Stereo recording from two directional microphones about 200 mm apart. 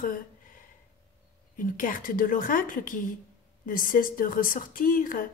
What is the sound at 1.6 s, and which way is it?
Speech, 45° left (ahead or behind).